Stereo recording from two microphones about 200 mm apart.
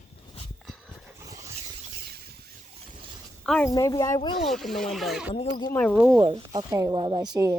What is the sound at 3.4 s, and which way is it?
Speech, 5° left (ahead or behind).